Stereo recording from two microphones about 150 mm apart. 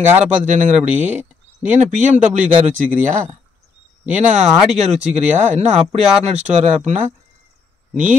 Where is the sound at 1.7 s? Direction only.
50° right (ahead or behind).